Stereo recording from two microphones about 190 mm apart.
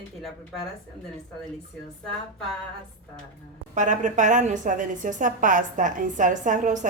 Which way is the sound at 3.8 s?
40° right (ahead or behind).